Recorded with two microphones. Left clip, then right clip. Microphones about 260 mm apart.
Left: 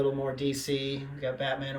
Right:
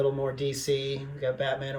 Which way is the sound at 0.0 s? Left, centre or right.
Centre.